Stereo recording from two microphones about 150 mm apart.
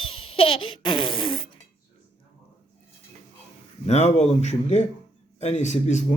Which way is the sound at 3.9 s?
50° left (ahead or behind).